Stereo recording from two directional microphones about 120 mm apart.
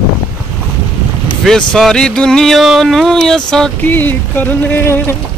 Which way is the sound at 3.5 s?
5° left (ahead or behind).